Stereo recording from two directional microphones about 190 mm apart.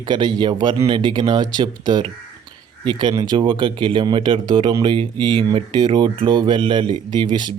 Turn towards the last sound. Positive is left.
turn(degrees=-25)  # may be behind; listen again after turning